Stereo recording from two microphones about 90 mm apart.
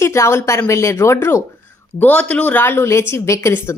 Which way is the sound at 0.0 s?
30° left (ahead or behind).